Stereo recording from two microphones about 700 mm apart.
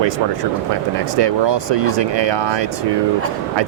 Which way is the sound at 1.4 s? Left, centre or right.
Right.